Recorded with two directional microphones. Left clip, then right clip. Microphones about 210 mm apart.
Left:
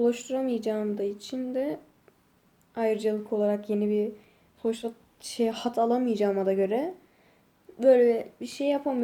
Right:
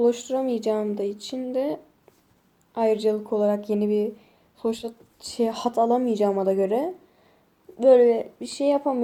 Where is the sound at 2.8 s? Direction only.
15° right (ahead or behind).